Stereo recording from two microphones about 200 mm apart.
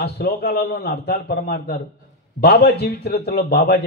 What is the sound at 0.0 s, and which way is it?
A man's voice, 50° left (ahead or behind).